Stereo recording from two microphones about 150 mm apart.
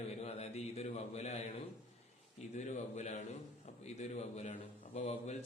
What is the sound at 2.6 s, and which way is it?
Speech, 50° left (ahead or behind).